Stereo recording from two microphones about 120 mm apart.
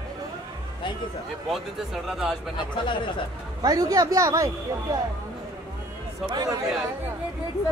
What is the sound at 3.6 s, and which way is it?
Speech, 30° right (ahead or behind).